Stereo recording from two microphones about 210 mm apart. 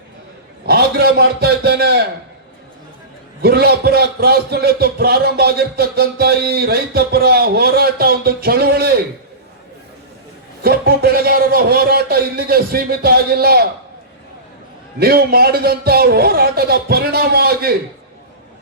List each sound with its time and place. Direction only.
0.6 s a man's voice: 50° right (ahead or behind)
3.4 s a man's voice: 50° right (ahead or behind)
10.6 s a man's voice: 45° right (ahead or behind)
14.9 s a man's voice: 45° right (ahead or behind)